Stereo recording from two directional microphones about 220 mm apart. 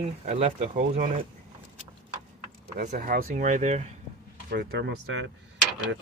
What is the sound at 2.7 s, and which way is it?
Speech, 40° right (ahead or behind).